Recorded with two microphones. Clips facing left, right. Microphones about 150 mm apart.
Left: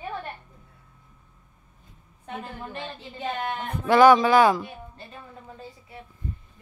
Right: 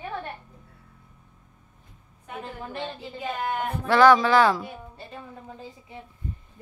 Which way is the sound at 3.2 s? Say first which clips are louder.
Right 1 dB; 20° left (ahead or behind).